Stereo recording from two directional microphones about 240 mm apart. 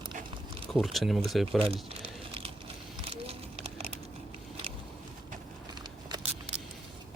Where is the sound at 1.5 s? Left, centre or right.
Right.